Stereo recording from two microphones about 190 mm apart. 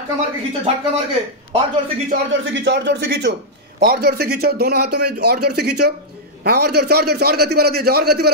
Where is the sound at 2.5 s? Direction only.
70° right (ahead or behind).